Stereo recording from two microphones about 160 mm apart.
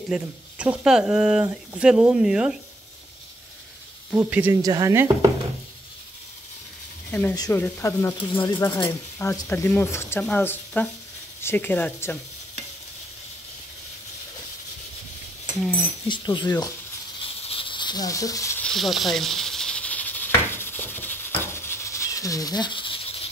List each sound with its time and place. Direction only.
0.1 s speech: 5° right (ahead or behind)
4.1 s speech: 10° right (ahead or behind)
4.6 s speech: 20° right (ahead or behind)
7.1 s speech: 10° left (ahead or behind)
16.1 s speech: 30° left (ahead or behind)
17.2 s a sound: 35° left (ahead or behind); by 18.6 s 20° left (ahead or behind)
18.6 s a sound: centre (ahead or behind); by 23.2 s 35° left (ahead or behind)